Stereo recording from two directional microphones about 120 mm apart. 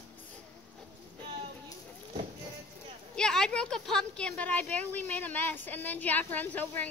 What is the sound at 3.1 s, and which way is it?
A woman's voice, 5° left (ahead or behind).